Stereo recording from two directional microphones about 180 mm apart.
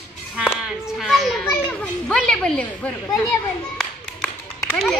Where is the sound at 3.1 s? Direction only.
15° left (ahead or behind).